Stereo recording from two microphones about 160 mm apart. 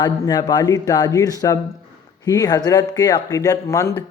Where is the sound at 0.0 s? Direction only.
25° left (ahead or behind).